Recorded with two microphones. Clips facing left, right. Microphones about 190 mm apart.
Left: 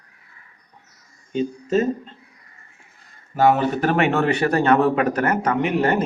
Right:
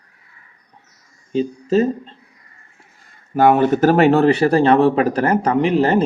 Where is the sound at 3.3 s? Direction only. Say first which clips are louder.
Right 4 dB; 55° right (ahead or behind).